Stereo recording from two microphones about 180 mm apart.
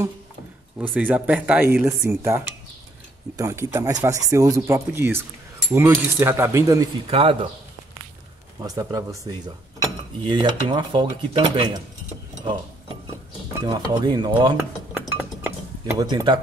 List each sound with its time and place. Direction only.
0.7 s speech: 10° right (ahead or behind)
7.1 s speech: 30° right (ahead or behind)
8.6 s speech: 20° right (ahead or behind)
12.4 s a sound: 25° right (ahead or behind)
13.7 s speech: 25° right (ahead or behind)
15.0 s chink: 10° right (ahead or behind)
16.0 s speech: 20° right (ahead or behind)